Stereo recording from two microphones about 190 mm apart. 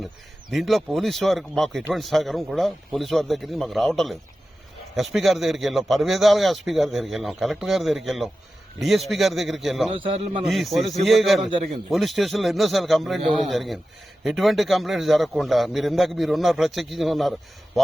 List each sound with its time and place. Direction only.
0.5 s speech: centre (ahead or behind)
9.9 s a man's voice: 30° right (ahead or behind)
10.5 s speech: centre (ahead or behind)